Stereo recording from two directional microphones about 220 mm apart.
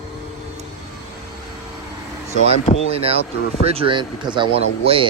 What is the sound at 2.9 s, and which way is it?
Speech, 25° right (ahead or behind).